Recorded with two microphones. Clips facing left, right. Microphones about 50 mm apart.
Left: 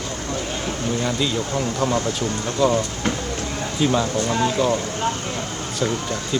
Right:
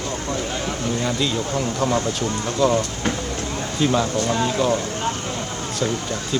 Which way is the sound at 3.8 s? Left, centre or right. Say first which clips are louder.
Even; centre.